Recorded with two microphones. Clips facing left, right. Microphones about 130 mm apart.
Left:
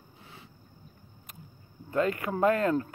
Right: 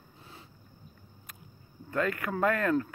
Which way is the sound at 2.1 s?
20° left (ahead or behind).